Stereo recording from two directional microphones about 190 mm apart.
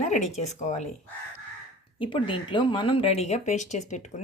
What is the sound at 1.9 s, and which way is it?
Speech, 25° left (ahead or behind).